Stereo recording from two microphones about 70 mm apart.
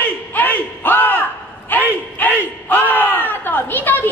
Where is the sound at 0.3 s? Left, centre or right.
Left.